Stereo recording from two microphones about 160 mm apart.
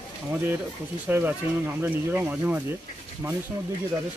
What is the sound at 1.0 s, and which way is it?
Speech, 10° right (ahead or behind).